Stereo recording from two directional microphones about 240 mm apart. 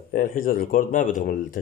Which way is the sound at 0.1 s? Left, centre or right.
Left.